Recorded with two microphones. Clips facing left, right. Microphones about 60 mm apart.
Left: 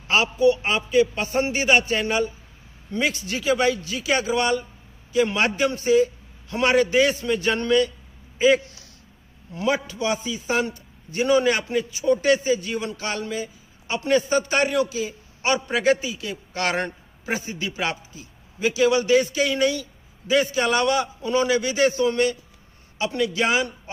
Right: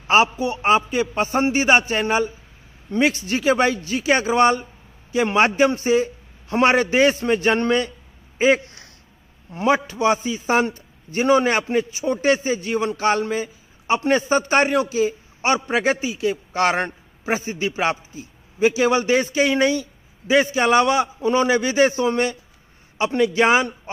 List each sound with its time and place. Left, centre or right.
0.1 s a man's voice: right